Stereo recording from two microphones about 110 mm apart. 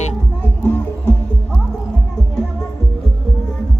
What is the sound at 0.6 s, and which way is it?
Music, 20° left (ahead or behind).